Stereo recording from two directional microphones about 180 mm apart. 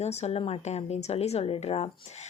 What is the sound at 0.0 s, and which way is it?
Speech, 35° left (ahead or behind).